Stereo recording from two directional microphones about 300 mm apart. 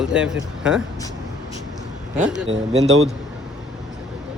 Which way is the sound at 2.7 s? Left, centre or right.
Right.